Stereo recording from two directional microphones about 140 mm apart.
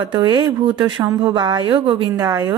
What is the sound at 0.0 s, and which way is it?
Speech, 30° right (ahead or behind).